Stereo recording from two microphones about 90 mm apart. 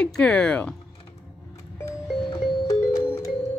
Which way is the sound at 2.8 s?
30° left (ahead or behind).